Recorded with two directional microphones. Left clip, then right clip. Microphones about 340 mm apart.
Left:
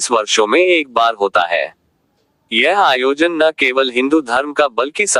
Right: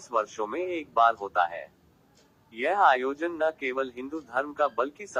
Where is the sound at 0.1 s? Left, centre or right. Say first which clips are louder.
Left 15 dB; left.